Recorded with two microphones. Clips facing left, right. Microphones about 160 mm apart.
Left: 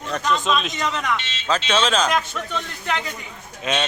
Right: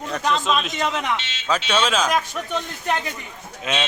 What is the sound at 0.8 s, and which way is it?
Speech, 20° right (ahead or behind).